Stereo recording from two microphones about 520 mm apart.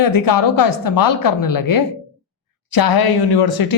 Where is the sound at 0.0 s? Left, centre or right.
Left.